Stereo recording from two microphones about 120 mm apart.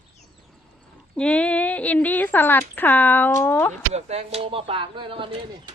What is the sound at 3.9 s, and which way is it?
Speech, 60° right (ahead or behind).